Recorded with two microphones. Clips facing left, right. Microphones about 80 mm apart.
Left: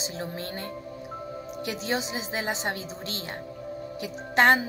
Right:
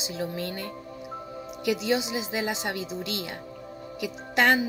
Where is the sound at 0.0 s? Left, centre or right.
Left.